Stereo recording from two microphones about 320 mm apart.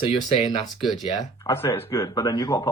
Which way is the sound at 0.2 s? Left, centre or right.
Centre.